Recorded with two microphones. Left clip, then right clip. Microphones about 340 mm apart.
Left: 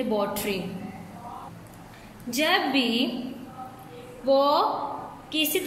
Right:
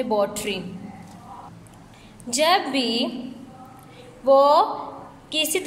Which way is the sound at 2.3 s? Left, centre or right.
Centre.